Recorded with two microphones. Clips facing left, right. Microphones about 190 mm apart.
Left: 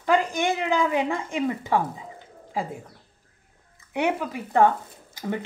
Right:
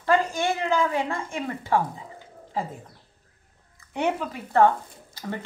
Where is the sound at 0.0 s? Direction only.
15° left (ahead or behind).